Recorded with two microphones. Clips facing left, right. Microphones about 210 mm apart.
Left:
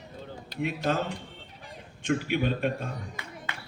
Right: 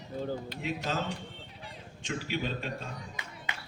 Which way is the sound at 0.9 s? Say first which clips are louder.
Left 5 dB; 55° left (ahead or behind).